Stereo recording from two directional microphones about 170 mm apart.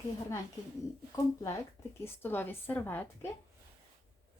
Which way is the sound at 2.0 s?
10° left (ahead or behind).